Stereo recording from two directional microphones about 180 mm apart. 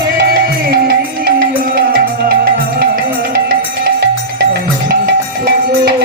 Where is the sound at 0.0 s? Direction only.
55° right (ahead or behind).